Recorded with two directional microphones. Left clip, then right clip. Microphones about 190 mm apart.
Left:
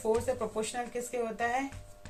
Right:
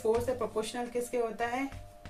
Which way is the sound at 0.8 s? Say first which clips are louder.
Left 1 dB; 20° right (ahead or behind).